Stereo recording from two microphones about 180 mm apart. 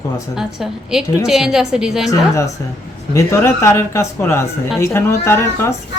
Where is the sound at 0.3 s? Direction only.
5° right (ahead or behind).